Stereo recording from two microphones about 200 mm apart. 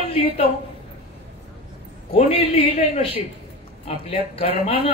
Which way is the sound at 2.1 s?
30° left (ahead or behind).